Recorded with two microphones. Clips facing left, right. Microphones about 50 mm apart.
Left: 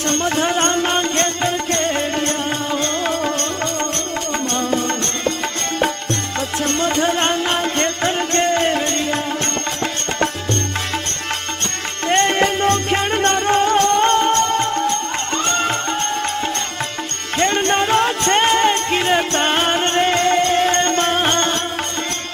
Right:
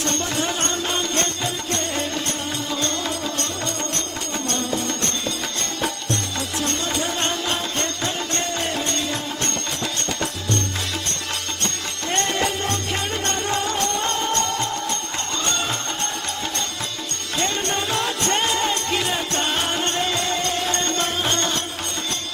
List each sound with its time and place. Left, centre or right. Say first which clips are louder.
0.0 s music: left 6 dB; left
4.4 s music: left 4 dB; left
6.6 s music: left 7 dB; left
12.0 s music: left 7 dB; left
17.3 s music: left 7 dB; left